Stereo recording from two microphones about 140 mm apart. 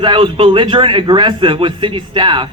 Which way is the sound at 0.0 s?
35° right (ahead or behind).